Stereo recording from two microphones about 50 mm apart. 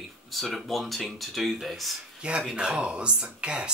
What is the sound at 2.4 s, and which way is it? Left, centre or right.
Speech, centre.